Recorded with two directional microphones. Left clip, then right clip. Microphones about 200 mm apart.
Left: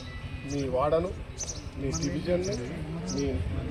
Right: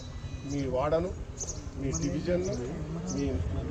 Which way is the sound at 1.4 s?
50° right (ahead or behind).